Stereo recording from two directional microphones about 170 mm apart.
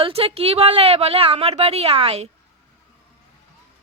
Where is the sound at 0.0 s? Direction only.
35° right (ahead or behind).